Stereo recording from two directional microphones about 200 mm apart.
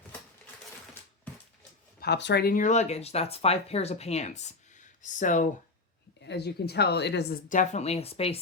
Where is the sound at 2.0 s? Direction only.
60° left (ahead or behind); by 5.5 s 40° left (ahead or behind).